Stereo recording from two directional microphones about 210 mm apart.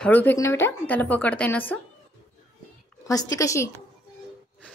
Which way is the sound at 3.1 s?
15° left (ahead or behind).